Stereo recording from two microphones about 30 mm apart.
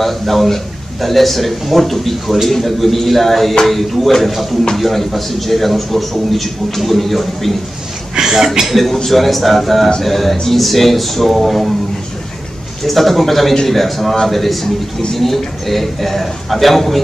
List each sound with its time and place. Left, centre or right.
0.0 s a man's voice: centre
8.2 s speech: centre
8.6 s a man's voice: centre
12.8 s a man's voice: centre